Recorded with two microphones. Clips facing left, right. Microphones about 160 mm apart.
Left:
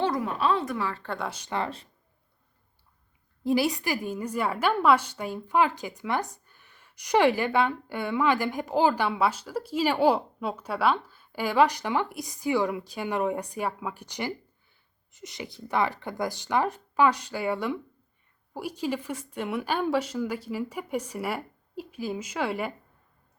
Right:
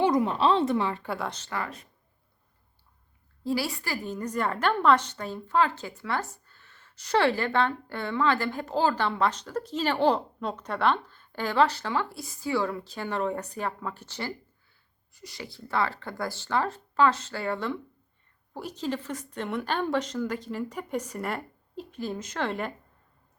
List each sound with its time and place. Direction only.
0.0 s a woman's voice: 20° right (ahead or behind)
1.0 s speech: 5° right (ahead or behind)
1.5 s speech: 25° left (ahead or behind)
3.4 s a woman's voice: 20° left (ahead or behind)